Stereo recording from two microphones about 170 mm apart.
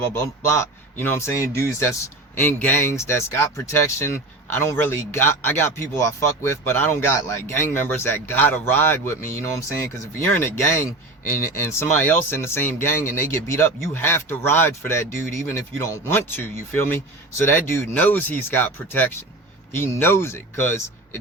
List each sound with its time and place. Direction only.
0.1 s speech: 15° left (ahead or behind)